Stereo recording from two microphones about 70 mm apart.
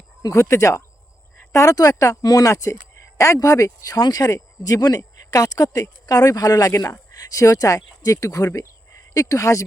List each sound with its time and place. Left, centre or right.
0.2 s speech: left
1.4 s a sound: left
1.7 s speech: left